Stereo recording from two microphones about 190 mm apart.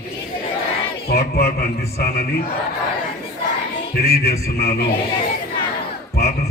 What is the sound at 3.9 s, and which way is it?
Speech, 55° left (ahead or behind).